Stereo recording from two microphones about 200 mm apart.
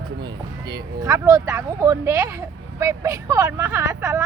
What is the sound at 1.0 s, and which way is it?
Speech, 15° right (ahead or behind).